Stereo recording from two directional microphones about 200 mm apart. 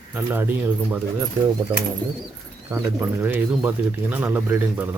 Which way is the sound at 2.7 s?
10° right (ahead or behind).